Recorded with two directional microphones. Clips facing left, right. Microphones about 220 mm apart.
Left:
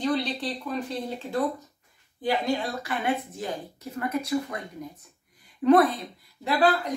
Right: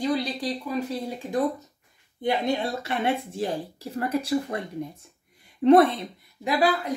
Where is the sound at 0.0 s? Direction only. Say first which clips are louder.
Right 1 dB; 10° right (ahead or behind).